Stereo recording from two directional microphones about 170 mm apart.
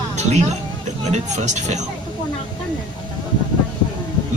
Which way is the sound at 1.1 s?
45° right (ahead or behind).